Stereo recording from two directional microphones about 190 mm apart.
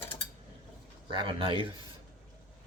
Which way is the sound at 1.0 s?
25° right (ahead or behind).